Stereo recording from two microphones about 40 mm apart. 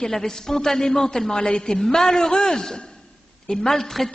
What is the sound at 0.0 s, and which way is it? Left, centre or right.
A woman's voice, centre.